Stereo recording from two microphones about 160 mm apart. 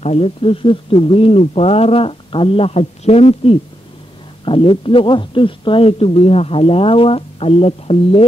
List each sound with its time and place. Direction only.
0.0 s speech: 40° left (ahead or behind)